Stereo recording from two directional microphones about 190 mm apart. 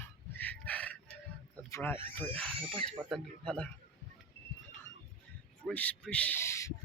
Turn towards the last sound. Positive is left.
turn(degrees=15)  # may be behind; listen again after turning